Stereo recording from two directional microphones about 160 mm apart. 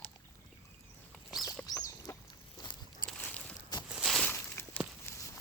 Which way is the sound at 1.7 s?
20° left (ahead or behind).